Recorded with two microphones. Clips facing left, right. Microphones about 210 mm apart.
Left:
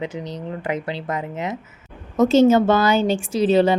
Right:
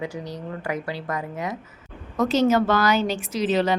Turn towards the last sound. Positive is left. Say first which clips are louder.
# left 6 dB
turn(degrees=30)  # may be behind; listen again after turning